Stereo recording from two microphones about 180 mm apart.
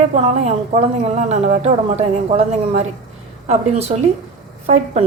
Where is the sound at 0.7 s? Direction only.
40° right (ahead or behind).